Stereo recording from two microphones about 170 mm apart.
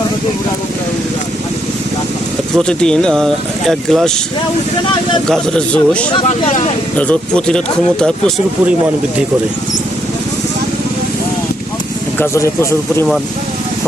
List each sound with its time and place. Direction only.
2.6 s speech: 5° left (ahead or behind)
5.3 s speech: 5° left (ahead or behind)
6.2 s speech: 40° left (ahead or behind)
6.9 s speech: 10° left (ahead or behind)
12.2 s speech: 15° left (ahead or behind)